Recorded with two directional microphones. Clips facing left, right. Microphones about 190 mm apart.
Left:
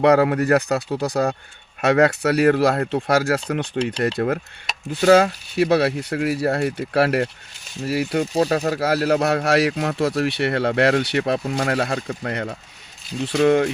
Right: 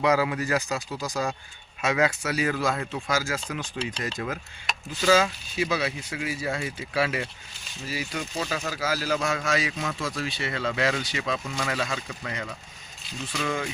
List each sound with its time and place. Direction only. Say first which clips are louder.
0.0 s speech: left 8 dB; 60° left (ahead or behind)